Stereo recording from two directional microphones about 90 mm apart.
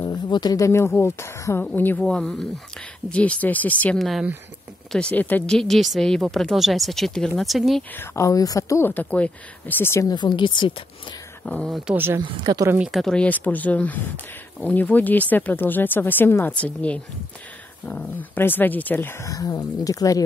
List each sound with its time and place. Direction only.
0.0 s a sound: 55° left (ahead or behind)
0.6 s speech: 30° left (ahead or behind)
2.0 s speech: 5° left (ahead or behind)
5.6 s speech: centre (ahead or behind)
7.9 s speech: 25° left (ahead or behind)
8.8 s speech: 15° left (ahead or behind)
10.0 s a woman's voice: 55° left (ahead or behind)
11.4 s speech: 10° left (ahead or behind)
11.9 s speech: 25° right (ahead or behind)
12.2 s a woman's voice: 50° right (ahead or behind)
12.9 s speech: 5° left (ahead or behind); by 19.2 s 25° left (ahead or behind)
19.2 s speech: 40° left (ahead or behind)